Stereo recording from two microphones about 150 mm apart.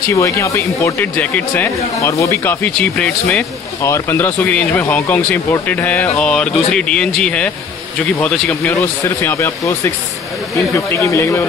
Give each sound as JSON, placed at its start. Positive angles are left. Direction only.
{"t": 0.1, "sound": "speech", "side_deg": 20}
{"t": 2.0, "sound": "speech", "side_deg": 20}
{"t": 3.8, "sound": "speech", "side_deg": 20}